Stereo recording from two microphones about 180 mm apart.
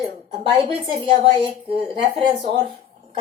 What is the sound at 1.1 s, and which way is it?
Speech, 30° right (ahead or behind).